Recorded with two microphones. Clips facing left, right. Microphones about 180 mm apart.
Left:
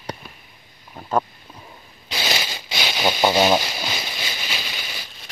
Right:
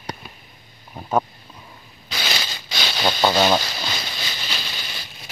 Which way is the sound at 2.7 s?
10° left (ahead or behind).